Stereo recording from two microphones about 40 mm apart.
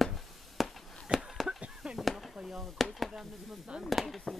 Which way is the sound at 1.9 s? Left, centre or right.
Centre.